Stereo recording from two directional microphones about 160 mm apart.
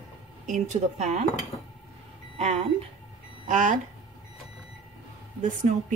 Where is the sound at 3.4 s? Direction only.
55° right (ahead or behind).